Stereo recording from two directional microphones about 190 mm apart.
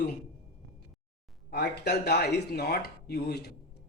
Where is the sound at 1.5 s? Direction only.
60° left (ahead or behind).